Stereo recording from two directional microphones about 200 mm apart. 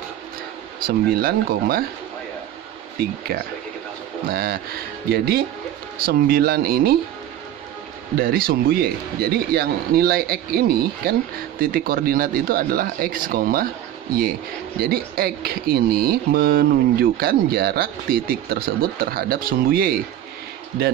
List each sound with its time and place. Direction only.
0.8 s speech: 45° right (ahead or behind)
3.3 s speech: 45° right (ahead or behind)
8.2 s speech: 45° right (ahead or behind)
14.8 s speech: 50° right (ahead or behind)